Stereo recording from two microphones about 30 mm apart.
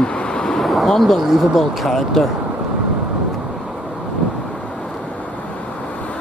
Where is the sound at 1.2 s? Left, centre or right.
Centre.